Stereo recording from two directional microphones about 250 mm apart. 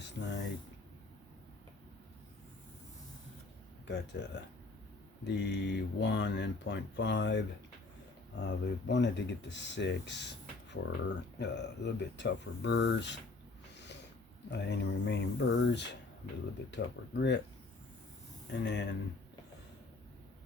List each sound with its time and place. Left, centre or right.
0.0 s a sound: left
3.8 s speech: left
14.5 s speech: left
18.6 s speech: left